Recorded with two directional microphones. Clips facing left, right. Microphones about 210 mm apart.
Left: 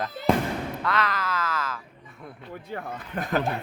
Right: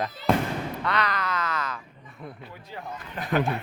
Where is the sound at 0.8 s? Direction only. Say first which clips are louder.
Even; centre (ahead or behind).